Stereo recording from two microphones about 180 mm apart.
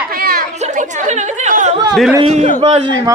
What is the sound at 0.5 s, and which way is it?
Speech, 40° right (ahead or behind).